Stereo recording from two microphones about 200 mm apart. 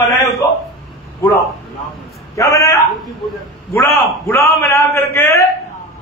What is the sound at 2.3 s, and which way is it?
A man's voice, 15° left (ahead or behind).